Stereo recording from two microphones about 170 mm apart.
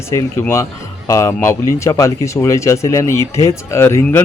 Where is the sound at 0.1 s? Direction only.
15° left (ahead or behind).